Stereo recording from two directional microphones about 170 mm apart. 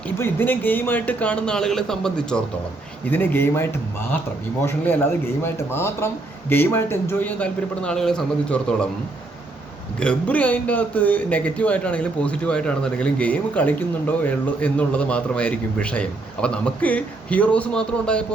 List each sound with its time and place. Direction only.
0.2 s a man's voice: 10° left (ahead or behind)
10.0 s a man's voice: 5° left (ahead or behind)